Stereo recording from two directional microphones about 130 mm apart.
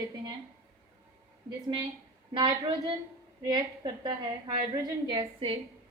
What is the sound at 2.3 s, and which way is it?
Speech, 35° right (ahead or behind).